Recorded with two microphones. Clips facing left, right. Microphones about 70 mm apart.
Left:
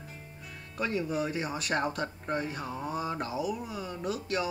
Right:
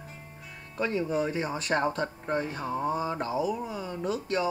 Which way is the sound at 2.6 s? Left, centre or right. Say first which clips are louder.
Right 5 dB; right.